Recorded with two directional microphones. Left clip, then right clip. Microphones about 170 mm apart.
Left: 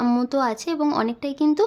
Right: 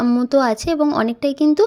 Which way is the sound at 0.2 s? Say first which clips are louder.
Right 6 dB; 25° right (ahead or behind).